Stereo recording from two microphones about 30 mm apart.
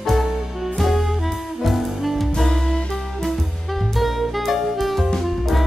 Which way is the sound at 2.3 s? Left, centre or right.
Centre.